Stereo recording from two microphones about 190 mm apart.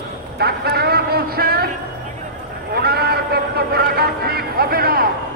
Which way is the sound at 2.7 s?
55° right (ahead or behind).